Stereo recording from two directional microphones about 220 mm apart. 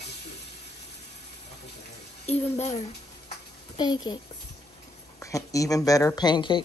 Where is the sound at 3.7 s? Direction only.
20° left (ahead or behind).